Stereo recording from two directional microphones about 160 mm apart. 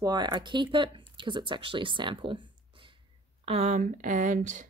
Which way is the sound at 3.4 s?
40° right (ahead or behind).